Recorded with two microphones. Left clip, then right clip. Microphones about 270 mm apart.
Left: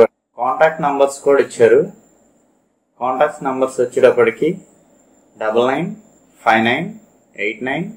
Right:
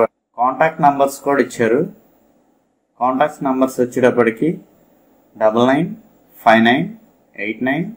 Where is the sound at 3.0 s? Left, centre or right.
Right.